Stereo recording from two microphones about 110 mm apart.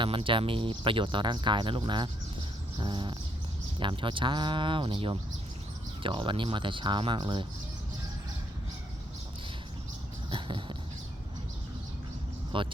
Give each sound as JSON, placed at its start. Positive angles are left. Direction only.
{"t": 0.0, "sound": "speech", "side_deg": -50}
{"t": 10.2, "sound": "a sound", "side_deg": -50}
{"t": 12.5, "sound": "speech", "side_deg": -50}